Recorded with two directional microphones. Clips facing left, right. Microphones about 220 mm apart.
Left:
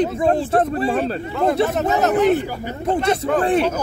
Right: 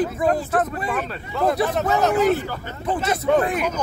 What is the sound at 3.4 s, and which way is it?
Speech, 30° left (ahead or behind).